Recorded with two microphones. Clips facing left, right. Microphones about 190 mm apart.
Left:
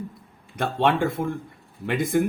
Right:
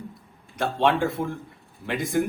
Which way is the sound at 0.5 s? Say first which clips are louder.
Even; 55° left (ahead or behind).